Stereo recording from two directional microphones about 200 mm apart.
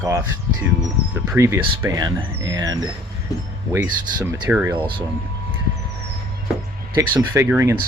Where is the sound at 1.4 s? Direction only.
15° right (ahead or behind).